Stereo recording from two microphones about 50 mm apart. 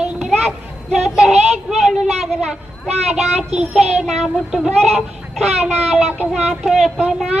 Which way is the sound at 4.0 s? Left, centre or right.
Centre.